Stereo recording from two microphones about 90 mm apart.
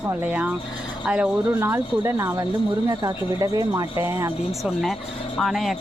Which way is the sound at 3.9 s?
30° right (ahead or behind).